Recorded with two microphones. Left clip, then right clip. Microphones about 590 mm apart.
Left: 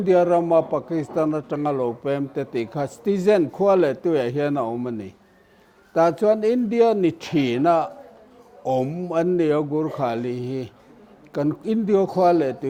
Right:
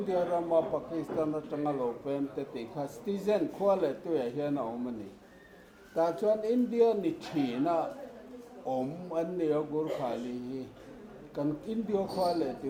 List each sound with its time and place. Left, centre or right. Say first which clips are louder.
0.1 s a man's voice: left 12 dB; left
5.9 s a man's voice: left 10 dB; left